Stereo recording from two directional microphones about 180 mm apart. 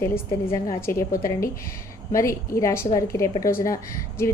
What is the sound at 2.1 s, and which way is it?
A woman's voice, 15° left (ahead or behind).